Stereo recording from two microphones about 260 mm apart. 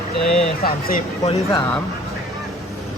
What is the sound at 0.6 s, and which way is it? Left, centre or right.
Speech, left.